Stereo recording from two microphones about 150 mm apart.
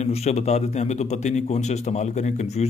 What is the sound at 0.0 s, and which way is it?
A man's voice, 45° left (ahead or behind).